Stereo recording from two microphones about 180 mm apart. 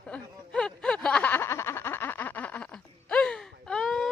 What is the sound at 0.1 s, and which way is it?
Snicker, 5° left (ahead or behind).